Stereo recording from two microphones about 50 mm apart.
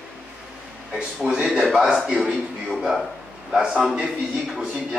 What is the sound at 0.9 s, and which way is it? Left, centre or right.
A man's voice, centre.